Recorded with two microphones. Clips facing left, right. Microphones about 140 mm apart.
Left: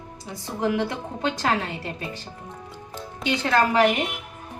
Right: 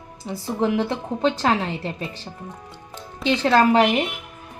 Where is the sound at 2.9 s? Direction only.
Centre (ahead or behind).